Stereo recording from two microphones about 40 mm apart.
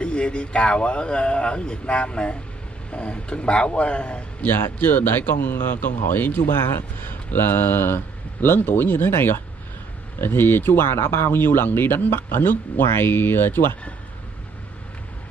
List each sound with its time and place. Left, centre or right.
0.0 s a man's voice: left
4.5 s speech: left
6.5 s speech: left
8.5 s speech: left